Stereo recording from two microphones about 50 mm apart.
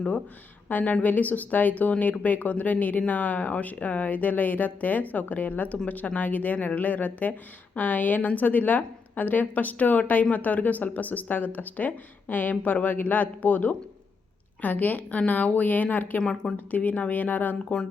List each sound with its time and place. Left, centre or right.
0.7 s speech: left
16.2 s speech: centre
16.7 s speech: left